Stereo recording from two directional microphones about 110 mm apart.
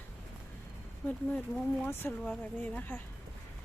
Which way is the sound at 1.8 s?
15° left (ahead or behind).